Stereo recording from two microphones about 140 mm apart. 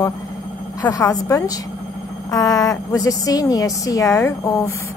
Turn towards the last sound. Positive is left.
turn(degrees=25)  # may be behind; listen again after turning